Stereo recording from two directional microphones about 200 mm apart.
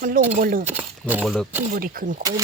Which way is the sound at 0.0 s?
45° right (ahead or behind).